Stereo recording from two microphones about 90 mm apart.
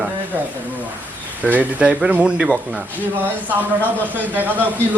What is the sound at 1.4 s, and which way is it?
Speech, 15° right (ahead or behind).